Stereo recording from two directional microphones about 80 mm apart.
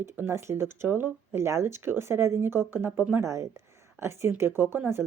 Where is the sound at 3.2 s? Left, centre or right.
Right.